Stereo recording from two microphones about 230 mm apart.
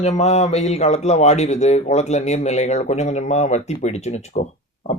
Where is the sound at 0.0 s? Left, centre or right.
Left.